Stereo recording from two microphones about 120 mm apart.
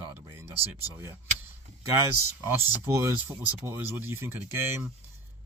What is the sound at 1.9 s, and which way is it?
Speech, 20° right (ahead or behind).